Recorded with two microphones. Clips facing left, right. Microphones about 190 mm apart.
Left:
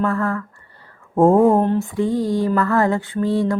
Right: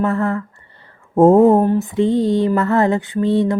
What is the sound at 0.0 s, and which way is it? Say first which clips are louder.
Mantra: right 2 dB; 25° right (ahead or behind).